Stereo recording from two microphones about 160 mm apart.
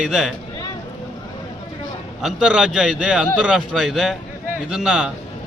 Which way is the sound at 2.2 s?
5° right (ahead or behind).